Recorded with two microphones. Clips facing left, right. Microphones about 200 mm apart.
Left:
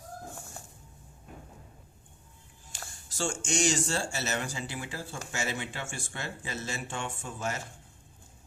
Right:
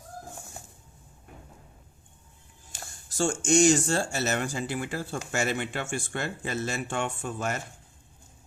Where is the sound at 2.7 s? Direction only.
50° right (ahead or behind).